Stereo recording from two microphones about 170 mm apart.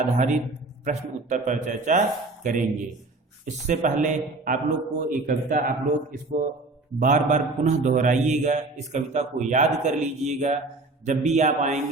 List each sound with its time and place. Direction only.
0.9 s a man's voice: 45° right (ahead or behind)